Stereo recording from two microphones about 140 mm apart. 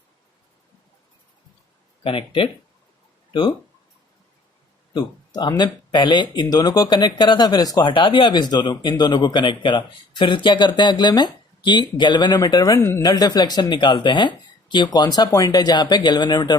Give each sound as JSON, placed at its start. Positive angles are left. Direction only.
{"t": 2.0, "sound": "speech", "side_deg": 40}
{"t": 4.9, "sound": "speech", "side_deg": 30}